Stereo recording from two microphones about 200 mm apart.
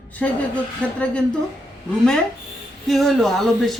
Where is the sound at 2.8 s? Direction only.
Centre (ahead or behind).